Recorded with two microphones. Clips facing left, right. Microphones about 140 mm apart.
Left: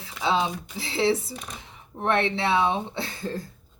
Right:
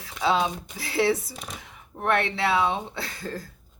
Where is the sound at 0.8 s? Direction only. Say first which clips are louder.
Even; 25° left (ahead or behind).